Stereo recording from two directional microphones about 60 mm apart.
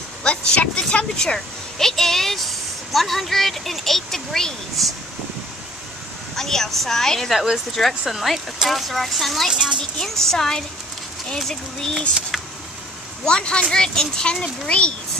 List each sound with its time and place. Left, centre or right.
0.7 s a woman's voice: centre
6.3 s a woman's voice: centre
9.5 s speech: centre
9.9 s a child's voice: centre
12.3 s a sound: centre
13.2 s a child's voice: centre